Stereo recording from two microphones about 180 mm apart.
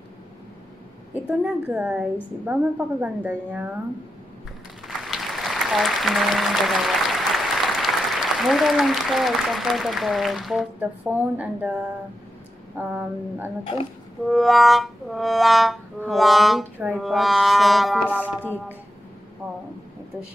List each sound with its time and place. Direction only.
1.4 s a woman's voice: 5° right (ahead or behind)
4.8 s a woman's voice: centre (ahead or behind)
14.2 s speech: centre (ahead or behind)
18.0 s music: 10° left (ahead or behind)